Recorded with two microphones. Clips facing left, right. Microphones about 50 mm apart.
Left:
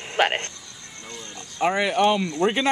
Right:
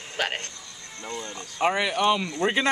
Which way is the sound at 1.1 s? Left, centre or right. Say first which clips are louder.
Right 5 dB; centre.